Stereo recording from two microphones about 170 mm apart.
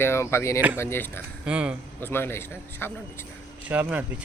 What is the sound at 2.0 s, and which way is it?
Speech, 15° left (ahead or behind).